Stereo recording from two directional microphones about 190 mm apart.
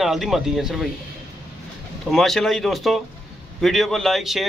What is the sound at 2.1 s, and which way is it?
Speech, centre (ahead or behind).